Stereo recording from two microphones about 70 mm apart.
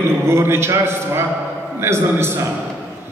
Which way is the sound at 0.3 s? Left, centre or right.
Right.